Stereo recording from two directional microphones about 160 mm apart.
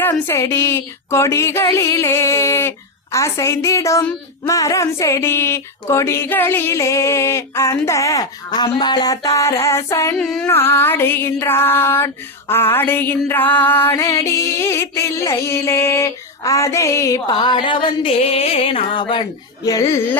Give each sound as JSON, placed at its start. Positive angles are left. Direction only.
{"t": 0.1, "sound": "female singing", "side_deg": 15}
{"t": 10.2, "sound": "a sound", "side_deg": 5}
{"t": 10.4, "sound": "female singing", "side_deg": 15}
{"t": 19.6, "sound": "a child's voice", "side_deg": 20}